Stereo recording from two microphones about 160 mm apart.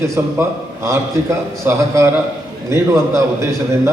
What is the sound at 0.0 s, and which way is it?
A man's voice, 15° right (ahead or behind).